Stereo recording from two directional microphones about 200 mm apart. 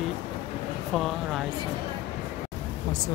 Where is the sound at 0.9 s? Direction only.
Centre (ahead or behind).